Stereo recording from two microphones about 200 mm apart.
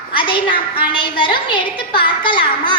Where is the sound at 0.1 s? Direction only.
25° left (ahead or behind).